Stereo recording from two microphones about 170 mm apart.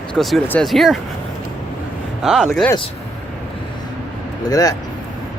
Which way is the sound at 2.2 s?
5° right (ahead or behind).